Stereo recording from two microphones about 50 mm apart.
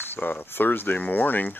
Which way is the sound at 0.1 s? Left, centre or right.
Left.